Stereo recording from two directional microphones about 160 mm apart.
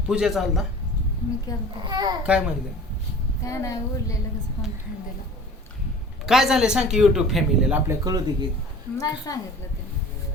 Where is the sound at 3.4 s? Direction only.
20° left (ahead or behind).